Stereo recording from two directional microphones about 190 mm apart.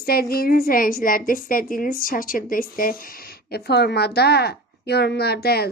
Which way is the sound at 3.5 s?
60° left (ahead or behind).